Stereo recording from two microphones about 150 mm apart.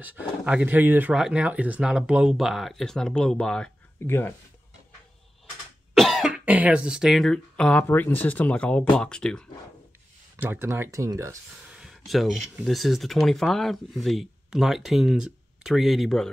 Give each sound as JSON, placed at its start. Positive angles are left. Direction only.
{"t": 0.0, "sound": "speech", "side_deg": -10}
{"t": 4.0, "sound": "speech", "side_deg": 15}
{"t": 5.9, "sound": "speech", "side_deg": 0}
{"t": 10.3, "sound": "speech", "side_deg": -15}
{"t": 11.7, "sound": "speech", "side_deg": 0}